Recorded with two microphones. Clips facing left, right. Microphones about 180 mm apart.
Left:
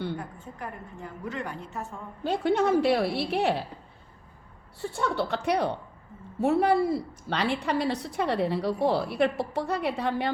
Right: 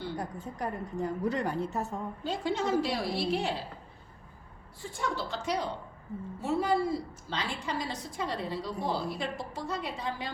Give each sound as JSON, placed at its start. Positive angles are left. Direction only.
{"t": 0.2, "sound": "a woman's voice", "side_deg": -40}
{"t": 2.2, "sound": "a woman's voice", "side_deg": 60}
{"t": 4.8, "sound": "a woman's voice", "side_deg": 65}